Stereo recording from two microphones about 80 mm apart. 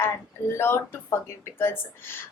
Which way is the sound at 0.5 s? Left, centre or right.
Left.